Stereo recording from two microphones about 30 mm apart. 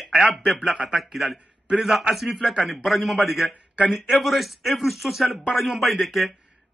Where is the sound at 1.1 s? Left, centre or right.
Centre.